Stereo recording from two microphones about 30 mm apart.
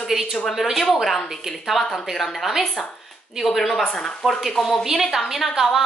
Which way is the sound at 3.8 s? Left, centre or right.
Left.